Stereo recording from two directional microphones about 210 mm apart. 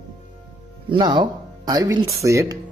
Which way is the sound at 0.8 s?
20° right (ahead or behind).